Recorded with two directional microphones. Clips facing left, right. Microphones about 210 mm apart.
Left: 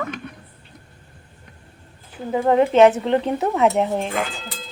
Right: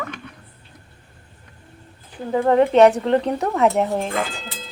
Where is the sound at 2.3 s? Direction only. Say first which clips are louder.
Right 1 dB; 10° left (ahead or behind).